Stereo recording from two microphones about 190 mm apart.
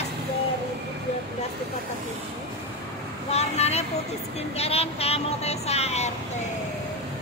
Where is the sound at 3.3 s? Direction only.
35° left (ahead or behind).